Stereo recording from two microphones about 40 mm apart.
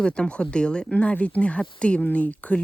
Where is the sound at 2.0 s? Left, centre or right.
Left.